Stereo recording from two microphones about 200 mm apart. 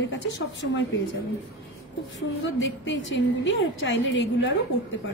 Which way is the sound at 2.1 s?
70° left (ahead or behind).